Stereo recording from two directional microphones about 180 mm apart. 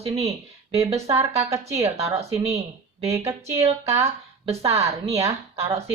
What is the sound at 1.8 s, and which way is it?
A woman's voice, 35° right (ahead or behind).